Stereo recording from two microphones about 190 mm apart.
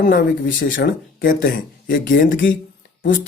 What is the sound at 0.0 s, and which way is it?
Speech, 50° left (ahead or behind).